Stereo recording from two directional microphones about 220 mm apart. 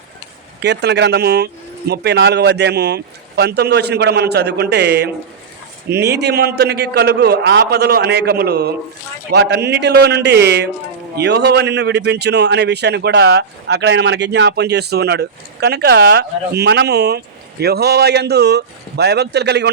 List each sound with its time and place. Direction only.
0.6 s a man's voice: 50° right (ahead or behind)